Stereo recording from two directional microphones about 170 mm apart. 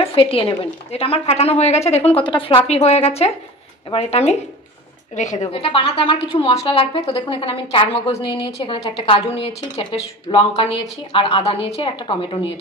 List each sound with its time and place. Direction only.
0.1 s a woman's voice: 35° left (ahead or behind)